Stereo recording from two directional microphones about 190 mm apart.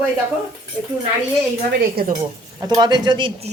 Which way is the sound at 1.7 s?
50° right (ahead or behind).